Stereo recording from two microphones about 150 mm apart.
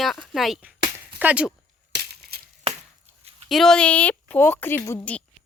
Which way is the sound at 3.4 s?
Centre (ahead or behind).